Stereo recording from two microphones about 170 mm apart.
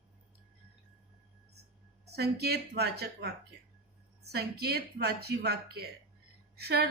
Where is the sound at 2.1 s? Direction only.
70° right (ahead or behind).